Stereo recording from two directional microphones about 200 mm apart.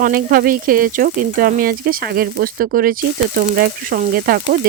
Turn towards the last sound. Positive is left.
turn(degrees=-45)  # may be behind; listen again after turning